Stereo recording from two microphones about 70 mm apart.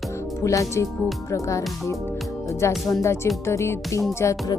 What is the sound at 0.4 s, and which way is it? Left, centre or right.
Speech, left.